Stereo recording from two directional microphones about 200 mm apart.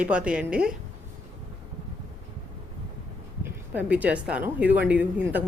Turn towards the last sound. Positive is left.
turn(degrees=-10)  # may be behind; listen again after turning